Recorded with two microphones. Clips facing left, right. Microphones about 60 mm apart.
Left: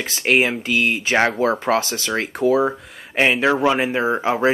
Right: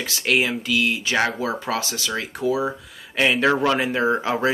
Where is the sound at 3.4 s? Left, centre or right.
Centre.